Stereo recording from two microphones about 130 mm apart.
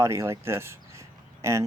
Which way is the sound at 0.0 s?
20° right (ahead or behind).